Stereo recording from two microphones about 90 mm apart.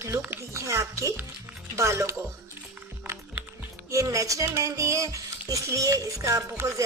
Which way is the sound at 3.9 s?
35° right (ahead or behind).